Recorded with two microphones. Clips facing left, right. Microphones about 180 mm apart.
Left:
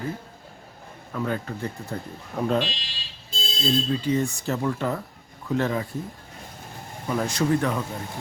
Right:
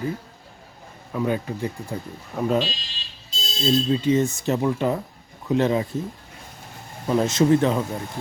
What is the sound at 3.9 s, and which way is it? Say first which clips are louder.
Speech: right 4 dB; 20° right (ahead or behind).